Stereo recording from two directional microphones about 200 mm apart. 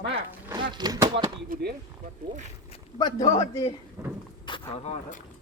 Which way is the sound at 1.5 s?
55° right (ahead or behind).